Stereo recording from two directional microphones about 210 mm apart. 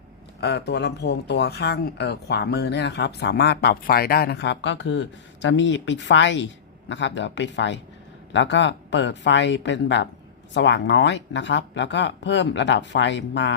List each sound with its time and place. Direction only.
0.3 s speech: 50° left (ahead or behind)